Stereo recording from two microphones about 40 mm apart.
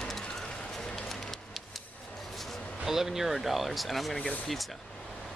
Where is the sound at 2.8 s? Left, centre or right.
Centre.